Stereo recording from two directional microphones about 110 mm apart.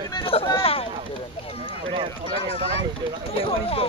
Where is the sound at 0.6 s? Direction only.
60° left (ahead or behind).